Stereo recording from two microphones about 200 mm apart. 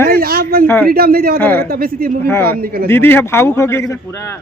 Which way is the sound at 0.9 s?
50° right (ahead or behind).